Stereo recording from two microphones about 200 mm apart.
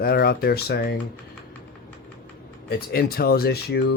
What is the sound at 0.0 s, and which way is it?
Speech, 50° left (ahead or behind).